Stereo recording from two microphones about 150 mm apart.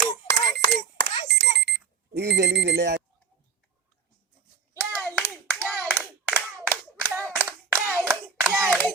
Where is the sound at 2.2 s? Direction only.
90° right.